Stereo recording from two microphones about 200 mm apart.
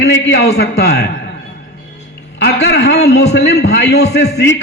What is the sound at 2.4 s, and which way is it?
A man's voice, 60° left (ahead or behind).